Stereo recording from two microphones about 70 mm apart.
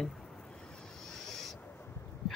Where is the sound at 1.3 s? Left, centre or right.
Centre.